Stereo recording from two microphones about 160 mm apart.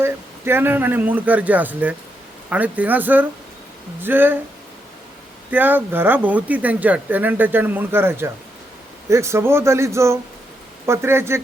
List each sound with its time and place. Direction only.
0.0 s speech: 15° right (ahead or behind)
5.5 s speech: 10° right (ahead or behind)